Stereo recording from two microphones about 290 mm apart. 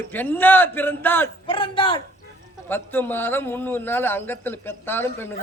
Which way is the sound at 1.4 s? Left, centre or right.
Centre.